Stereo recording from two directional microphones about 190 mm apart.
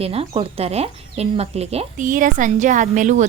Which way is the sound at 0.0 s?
30° right (ahead or behind).